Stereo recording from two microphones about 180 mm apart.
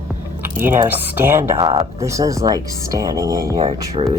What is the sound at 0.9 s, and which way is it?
Speech, 10° right (ahead or behind).